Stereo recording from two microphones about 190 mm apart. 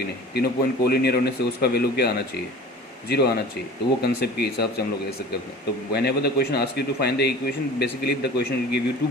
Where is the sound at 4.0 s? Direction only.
60° left (ahead or behind).